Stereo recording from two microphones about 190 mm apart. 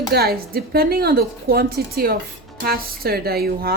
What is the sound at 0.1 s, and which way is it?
A woman's voice, 55° right (ahead or behind).